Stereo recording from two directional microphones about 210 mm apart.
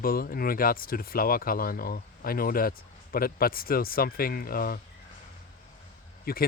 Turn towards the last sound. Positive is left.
turn(degrees=45)  # may be behind; listen again after turning